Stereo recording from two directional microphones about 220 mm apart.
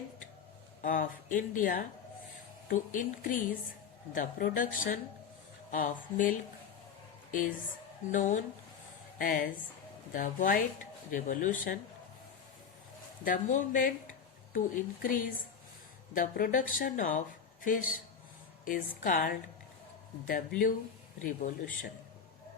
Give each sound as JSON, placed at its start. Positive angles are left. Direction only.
{"t": 0.8, "sound": "a woman's voice", "side_deg": 35}
{"t": 13.2, "sound": "speech", "side_deg": 35}
{"t": 15.0, "sound": "speech", "side_deg": 40}